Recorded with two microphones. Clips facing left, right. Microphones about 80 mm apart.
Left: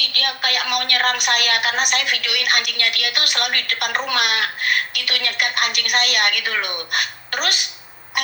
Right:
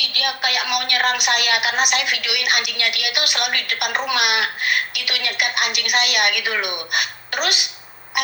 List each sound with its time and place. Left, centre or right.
0.0 s a woman's voice: left